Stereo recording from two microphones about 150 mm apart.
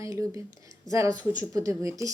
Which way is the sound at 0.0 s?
20° right (ahead or behind).